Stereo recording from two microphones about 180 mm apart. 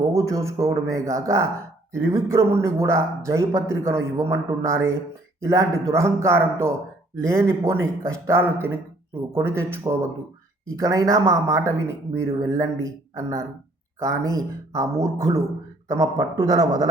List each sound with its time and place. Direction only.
0.0 s a man's voice: 20° right (ahead or behind)